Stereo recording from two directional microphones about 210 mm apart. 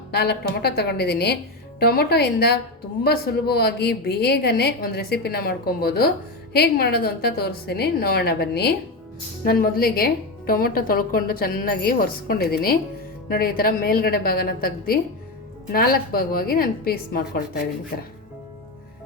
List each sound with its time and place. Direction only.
0.1 s a woman's voice: 50° left (ahead or behind)